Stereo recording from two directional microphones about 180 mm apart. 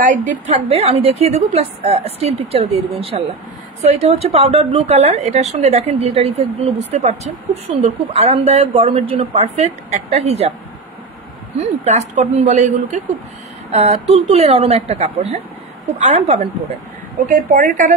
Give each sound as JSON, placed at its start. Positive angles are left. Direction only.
{"t": 0.0, "sound": "a woman's voice", "side_deg": -45}
{"t": 0.5, "sound": "a woman's voice", "side_deg": -35}
{"t": 11.6, "sound": "a woman's voice", "side_deg": -35}
{"t": 17.2, "sound": "a woman's voice", "side_deg": -50}